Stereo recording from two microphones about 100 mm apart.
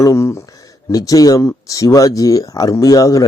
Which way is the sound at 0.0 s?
30° left (ahead or behind).